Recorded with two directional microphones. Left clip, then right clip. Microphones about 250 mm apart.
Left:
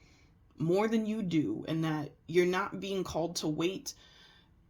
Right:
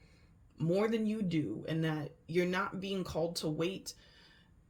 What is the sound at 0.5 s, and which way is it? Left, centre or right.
Speech, left.